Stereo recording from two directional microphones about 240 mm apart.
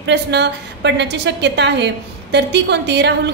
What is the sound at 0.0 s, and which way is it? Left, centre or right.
A woman's voice, right.